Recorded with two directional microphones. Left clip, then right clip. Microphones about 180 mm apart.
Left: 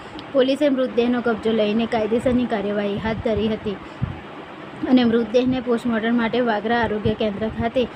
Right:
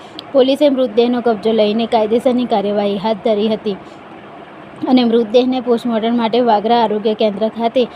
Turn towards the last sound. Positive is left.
turn(degrees=-15)  # may be behind; listen again after turning